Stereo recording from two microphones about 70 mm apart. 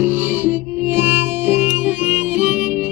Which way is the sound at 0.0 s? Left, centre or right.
Right.